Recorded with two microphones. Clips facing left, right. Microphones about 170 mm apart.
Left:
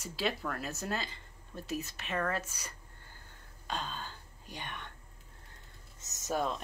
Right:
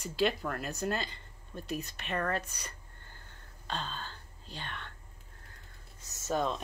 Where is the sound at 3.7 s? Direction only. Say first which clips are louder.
Even; 10° left (ahead or behind).